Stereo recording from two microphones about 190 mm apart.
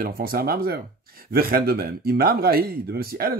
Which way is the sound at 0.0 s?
50° right (ahead or behind).